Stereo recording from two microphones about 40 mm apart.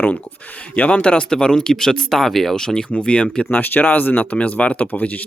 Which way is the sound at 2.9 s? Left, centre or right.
Left.